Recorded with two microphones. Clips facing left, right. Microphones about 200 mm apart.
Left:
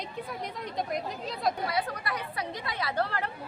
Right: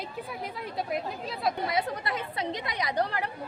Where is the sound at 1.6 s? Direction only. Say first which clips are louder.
Right 2 dB; 20° right (ahead or behind).